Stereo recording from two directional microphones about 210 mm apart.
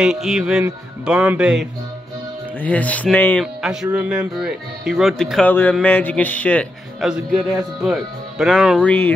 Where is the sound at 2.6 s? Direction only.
5° left (ahead or behind).